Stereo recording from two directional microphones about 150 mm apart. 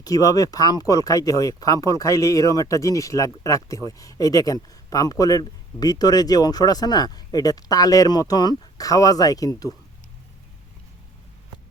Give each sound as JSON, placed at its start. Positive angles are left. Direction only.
{"t": 0.0, "sound": "speech", "side_deg": 25}